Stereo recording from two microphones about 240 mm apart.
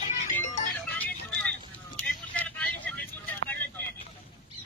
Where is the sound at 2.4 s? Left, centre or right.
Centre.